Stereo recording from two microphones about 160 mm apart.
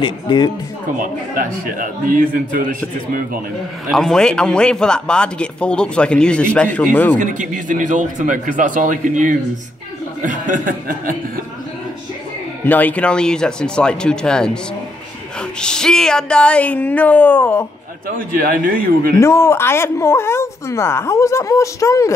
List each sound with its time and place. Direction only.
0.0 s speech: 30° left (ahead or behind)
0.9 s a man's voice: 60° right (ahead or behind)
3.9 s speech: centre (ahead or behind)
7.2 s a man's voice: 55° right (ahead or behind)
12.6 s speech: 10° left (ahead or behind)
15.6 s speech: 5° left (ahead or behind)
18.0 s a man's voice: 60° right (ahead or behind)
19.1 s speech: 15° left (ahead or behind)